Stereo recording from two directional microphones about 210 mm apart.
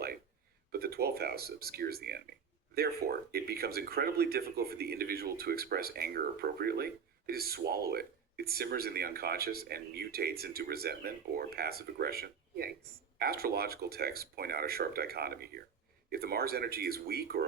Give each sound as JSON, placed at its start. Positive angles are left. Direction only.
{"t": 0.7, "sound": "speech", "side_deg": -45}